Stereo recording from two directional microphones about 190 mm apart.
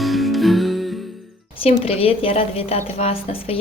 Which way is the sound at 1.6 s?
30° left (ahead or behind).